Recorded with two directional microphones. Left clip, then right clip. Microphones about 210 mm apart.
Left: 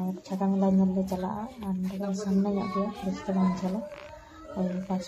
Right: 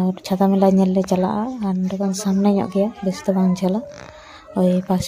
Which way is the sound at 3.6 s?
60° right (ahead or behind).